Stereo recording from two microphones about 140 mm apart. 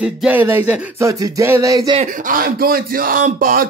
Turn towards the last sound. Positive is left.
turn(degrees=-90)